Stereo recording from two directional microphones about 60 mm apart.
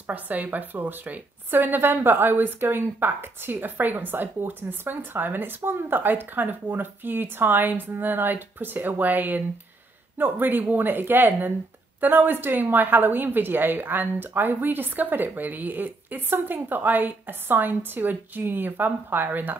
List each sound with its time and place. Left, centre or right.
0.0 s a woman's voice: right